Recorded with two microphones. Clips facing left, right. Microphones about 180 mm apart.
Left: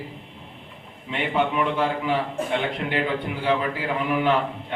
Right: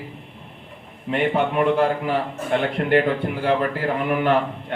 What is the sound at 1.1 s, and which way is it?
A man's voice, 50° right (ahead or behind).